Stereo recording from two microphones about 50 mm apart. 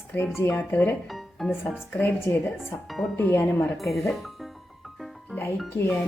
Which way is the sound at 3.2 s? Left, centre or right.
Left.